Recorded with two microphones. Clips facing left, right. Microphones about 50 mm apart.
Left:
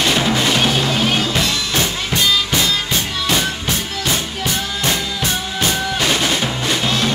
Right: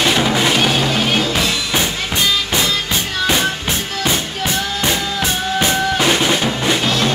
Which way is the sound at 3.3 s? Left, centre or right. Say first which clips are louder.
Right 2 dB; right.